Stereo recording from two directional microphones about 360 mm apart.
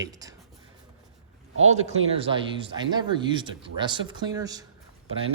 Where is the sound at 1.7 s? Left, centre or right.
Centre.